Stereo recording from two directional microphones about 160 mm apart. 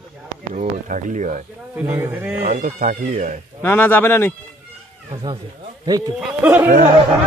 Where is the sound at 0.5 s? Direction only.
50° right (ahead or behind).